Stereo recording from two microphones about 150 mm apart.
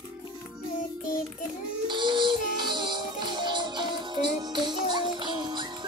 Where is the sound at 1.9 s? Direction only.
30° right (ahead or behind).